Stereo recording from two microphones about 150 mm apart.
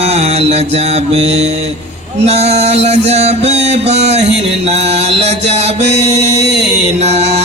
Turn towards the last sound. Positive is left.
turn(degrees=-45)  # may be behind; listen again after turning